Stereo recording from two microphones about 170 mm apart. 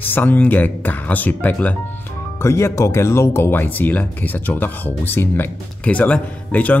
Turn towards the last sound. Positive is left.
turn(degrees=10)  # may be behind; listen again after turning